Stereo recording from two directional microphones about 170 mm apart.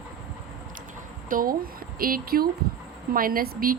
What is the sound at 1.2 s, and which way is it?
A woman's voice, 55° right (ahead or behind).